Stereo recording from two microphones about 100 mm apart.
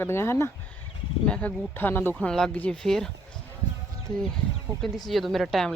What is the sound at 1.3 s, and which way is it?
Speech, 15° left (ahead or behind).